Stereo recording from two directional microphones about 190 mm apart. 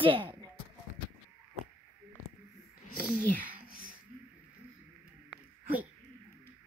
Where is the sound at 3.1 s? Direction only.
50° left (ahead or behind).